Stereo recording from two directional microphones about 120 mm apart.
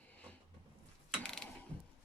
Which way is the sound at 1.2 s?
5° left (ahead or behind).